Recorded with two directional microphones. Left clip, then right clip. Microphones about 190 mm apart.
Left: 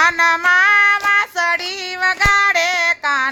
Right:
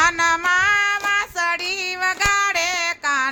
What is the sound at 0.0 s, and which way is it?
Child singing, 5° left (ahead or behind).